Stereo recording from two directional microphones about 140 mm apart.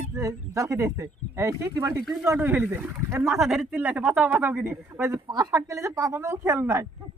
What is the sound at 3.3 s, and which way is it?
Speech, centre (ahead or behind).